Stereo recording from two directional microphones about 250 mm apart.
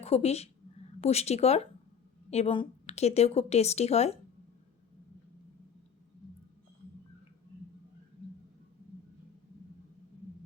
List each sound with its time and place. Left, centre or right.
0.0 s a woman's voice: left